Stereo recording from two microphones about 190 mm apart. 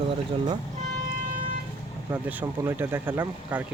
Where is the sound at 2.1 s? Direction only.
10° right (ahead or behind).